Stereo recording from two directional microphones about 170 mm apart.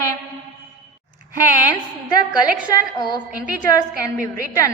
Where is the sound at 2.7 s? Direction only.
25° left (ahead or behind).